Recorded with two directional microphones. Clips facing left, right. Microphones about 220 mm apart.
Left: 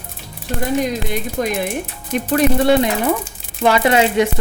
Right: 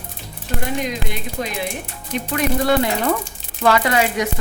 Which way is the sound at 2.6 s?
20° left (ahead or behind).